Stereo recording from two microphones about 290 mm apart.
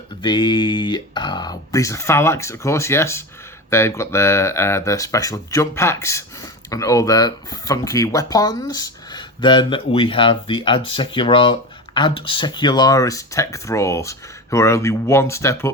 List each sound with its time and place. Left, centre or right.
0.2 s speech: centre